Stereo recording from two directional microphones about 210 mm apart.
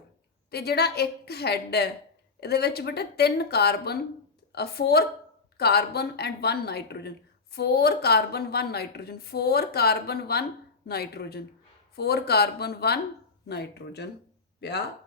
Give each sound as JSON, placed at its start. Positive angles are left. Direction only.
{"t": 0.5, "sound": "a woman's voice", "side_deg": 50}